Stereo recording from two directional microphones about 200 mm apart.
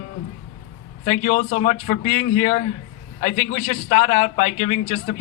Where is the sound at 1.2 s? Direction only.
45° left (ahead or behind).